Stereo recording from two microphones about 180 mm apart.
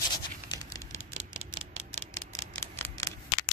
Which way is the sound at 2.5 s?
15° left (ahead or behind).